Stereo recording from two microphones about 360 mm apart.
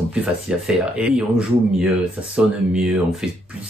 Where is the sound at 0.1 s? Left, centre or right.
Centre.